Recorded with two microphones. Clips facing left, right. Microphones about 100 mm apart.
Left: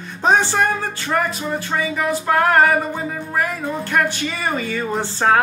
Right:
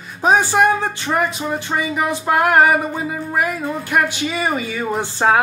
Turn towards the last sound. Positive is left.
turn(degrees=-10)  # may be behind; listen again after turning